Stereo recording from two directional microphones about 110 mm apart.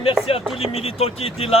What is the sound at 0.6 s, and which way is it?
Speech, 60° left (ahead or behind).